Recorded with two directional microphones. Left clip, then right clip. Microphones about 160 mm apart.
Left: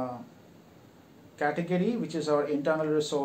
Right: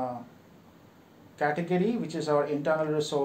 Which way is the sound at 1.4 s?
40° right (ahead or behind).